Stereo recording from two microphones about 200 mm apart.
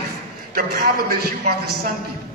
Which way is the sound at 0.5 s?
45° right (ahead or behind).